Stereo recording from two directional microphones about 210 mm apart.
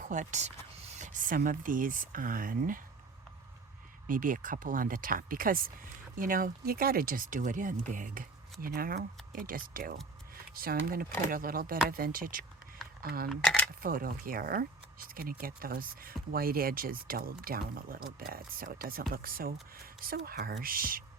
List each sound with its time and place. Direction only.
0.0 s speech: 35° right (ahead or behind)
4.0 s speech: 40° right (ahead or behind)
13.2 s speech: centre (ahead or behind)
13.8 s speech: 45° right (ahead or behind)